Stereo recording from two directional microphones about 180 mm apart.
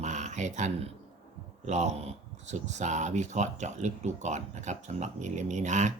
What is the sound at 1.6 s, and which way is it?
Speech, 40° right (ahead or behind).